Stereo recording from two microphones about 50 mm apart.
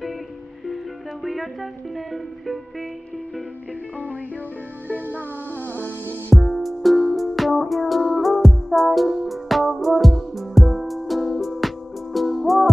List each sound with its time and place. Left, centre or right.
1.2 s music: centre
5.7 s music: left
6.3 s music: centre